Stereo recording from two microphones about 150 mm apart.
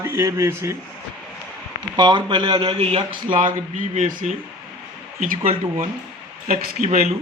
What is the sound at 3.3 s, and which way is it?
Speech, 60° right (ahead or behind).